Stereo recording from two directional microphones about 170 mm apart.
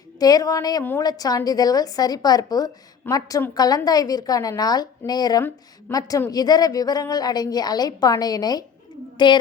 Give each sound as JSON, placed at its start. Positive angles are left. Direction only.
{"t": 0.2, "sound": "speech", "side_deg": 20}